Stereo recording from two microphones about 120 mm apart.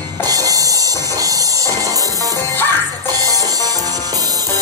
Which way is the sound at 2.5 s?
15° left (ahead or behind).